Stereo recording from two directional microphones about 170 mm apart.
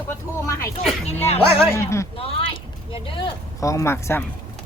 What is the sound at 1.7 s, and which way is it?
Speech, 15° left (ahead or behind).